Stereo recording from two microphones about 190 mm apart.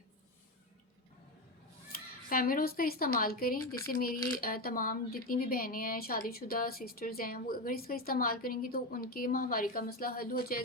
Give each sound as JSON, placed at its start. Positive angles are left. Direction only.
{"t": 1.9, "sound": "speech", "side_deg": 50}